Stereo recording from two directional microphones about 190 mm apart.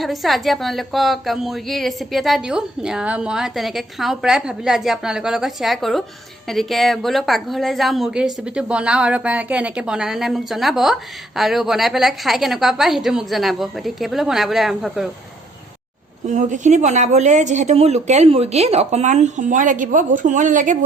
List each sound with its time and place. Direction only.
0.0 s a woman's voice: centre (ahead or behind)
16.2 s a woman's voice: 40° right (ahead or behind)